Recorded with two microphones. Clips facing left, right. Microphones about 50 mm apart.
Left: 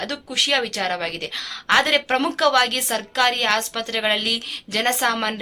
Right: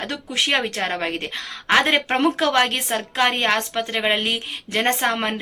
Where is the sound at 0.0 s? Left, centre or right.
Right.